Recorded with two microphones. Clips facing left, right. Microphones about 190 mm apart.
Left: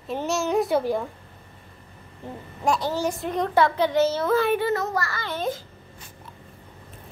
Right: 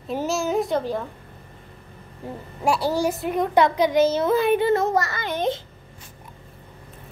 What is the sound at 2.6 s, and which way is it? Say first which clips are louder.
A child's voice: right 2 dB; 10° right (ahead or behind).